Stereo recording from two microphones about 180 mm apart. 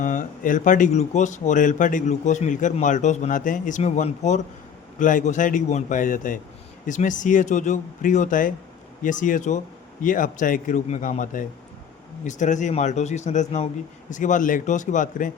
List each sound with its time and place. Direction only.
0.0 s a man's voice: 45° left (ahead or behind)